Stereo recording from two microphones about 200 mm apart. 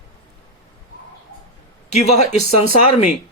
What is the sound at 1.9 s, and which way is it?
Speech, 35° left (ahead or behind).